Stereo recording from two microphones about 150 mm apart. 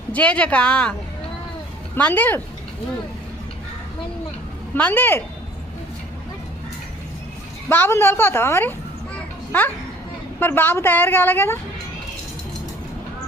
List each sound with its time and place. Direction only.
0.1 s a woman's voice: 10° left (ahead or behind)
2.0 s a woman's voice: 10° left (ahead or behind)
4.7 s a woman's voice: 10° left (ahead or behind)
7.7 s a woman's voice: 15° left (ahead or behind)